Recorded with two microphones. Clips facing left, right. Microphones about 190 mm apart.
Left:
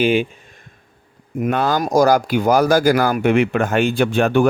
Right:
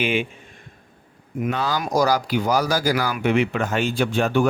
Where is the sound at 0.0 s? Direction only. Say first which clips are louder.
Left 6 dB; 35° left (ahead or behind).